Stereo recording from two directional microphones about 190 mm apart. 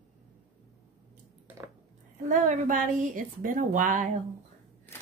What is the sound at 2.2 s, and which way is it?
A woman's voice, 40° right (ahead or behind).